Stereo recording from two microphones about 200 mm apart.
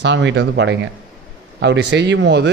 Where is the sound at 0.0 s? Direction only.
60° right (ahead or behind).